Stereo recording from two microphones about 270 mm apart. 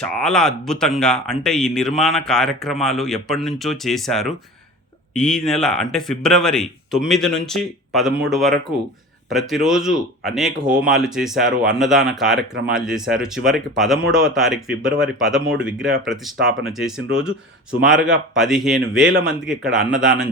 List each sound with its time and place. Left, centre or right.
0.0 s speech: centre
16.4 s speech: right
16.7 s speech: centre